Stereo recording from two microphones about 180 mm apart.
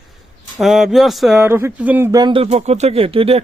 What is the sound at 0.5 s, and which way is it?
Speech, centre (ahead or behind).